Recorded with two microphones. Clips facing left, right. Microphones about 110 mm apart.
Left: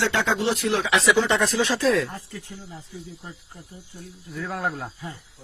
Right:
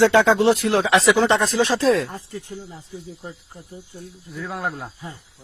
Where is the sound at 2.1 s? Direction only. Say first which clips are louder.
Right 4 dB; 20° right (ahead or behind).